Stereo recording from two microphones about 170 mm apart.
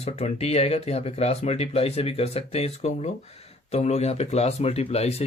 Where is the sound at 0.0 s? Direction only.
35° left (ahead or behind).